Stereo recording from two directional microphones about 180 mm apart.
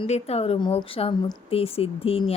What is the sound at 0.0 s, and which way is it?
Speech, 35° left (ahead or behind).